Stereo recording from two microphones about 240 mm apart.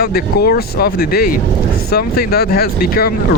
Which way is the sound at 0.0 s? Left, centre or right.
Left.